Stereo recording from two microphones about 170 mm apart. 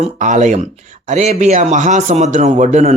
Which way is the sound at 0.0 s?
45° right (ahead or behind).